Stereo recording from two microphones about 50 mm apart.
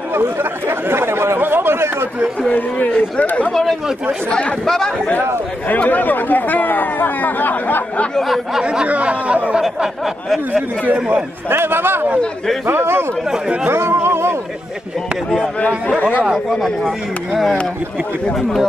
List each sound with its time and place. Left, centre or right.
0.1 s speech: right
1.4 s a sound: right
3.2 s speech: left
4.6 s a man's voice: centre
5.7 s speech: left
8.8 s speech: right
11.5 s a man's voice: right
13.7 s a sound: right
17.3 s speech: centre